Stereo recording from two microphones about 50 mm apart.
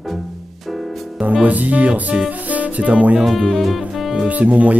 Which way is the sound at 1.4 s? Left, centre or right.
Right.